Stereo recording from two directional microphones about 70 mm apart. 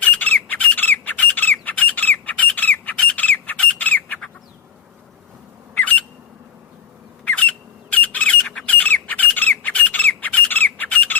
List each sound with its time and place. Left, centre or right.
0.1 s squawk: left
5.7 s squawk: left
7.3 s squawk: left